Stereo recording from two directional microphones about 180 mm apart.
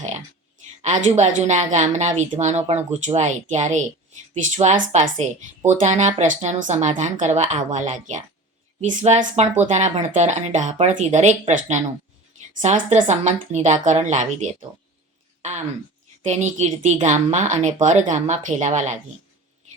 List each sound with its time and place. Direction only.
0.8 s speech: 40° right (ahead or behind)
15.4 s a sound: 40° right (ahead or behind)
16.2 s speech: 40° right (ahead or behind)